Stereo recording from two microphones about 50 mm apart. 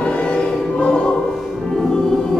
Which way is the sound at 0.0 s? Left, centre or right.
Left.